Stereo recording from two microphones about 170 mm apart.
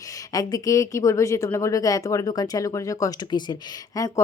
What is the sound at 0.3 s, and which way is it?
Speech, 20° left (ahead or behind).